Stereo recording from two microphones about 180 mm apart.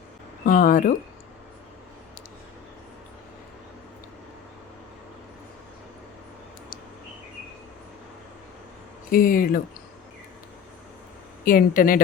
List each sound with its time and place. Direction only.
0.4 s speech: 50° left (ahead or behind)
9.0 s speech: 50° left (ahead or behind)
11.4 s speech: 50° left (ahead or behind)